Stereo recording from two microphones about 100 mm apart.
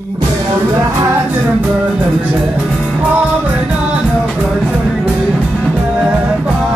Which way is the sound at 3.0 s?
15° right (ahead or behind).